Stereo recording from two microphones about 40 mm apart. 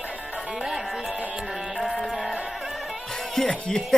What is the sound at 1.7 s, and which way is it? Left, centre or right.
Music, centre.